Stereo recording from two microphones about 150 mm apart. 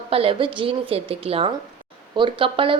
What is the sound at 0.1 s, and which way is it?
A woman's voice, 40° right (ahead or behind).